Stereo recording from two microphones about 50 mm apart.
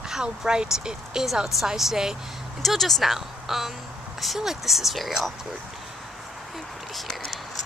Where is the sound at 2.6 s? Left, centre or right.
Centre.